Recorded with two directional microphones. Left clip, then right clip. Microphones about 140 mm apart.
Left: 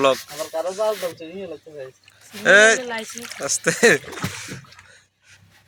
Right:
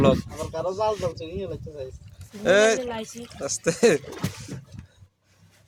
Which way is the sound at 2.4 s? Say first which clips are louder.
Left 6 dB; 5° right (ahead or behind).